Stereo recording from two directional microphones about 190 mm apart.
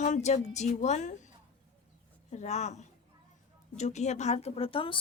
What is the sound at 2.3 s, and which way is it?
A woman's voice, 35° left (ahead or behind).